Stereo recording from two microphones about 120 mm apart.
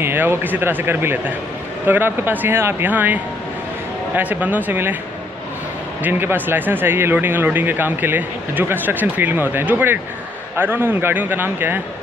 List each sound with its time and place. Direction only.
0.0 s speech: 20° right (ahead or behind)
6.0 s speech: 15° right (ahead or behind)